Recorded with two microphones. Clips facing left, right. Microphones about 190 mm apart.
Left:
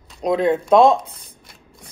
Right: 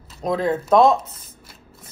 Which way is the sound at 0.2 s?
15° left (ahead or behind).